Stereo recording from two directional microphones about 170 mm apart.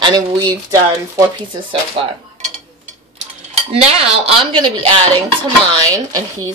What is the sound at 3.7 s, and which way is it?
Speech, 35° right (ahead or behind).